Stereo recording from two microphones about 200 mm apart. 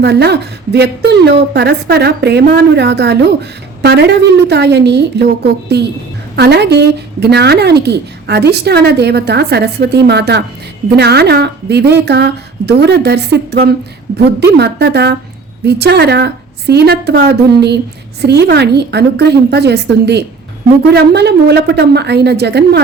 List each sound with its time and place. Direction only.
0.0 s speech: 55° right (ahead or behind)